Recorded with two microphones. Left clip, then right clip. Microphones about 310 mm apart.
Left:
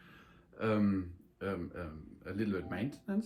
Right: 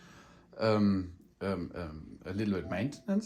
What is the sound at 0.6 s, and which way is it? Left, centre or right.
Speech, centre.